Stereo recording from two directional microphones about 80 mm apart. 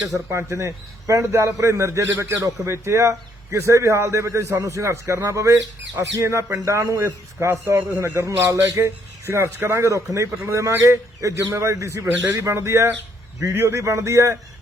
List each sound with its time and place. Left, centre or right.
0.3 s a man's voice: right